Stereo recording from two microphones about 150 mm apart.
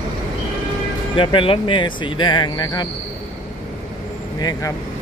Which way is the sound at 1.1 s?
35° left (ahead or behind).